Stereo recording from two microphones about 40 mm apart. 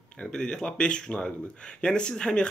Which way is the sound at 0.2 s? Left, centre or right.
Left.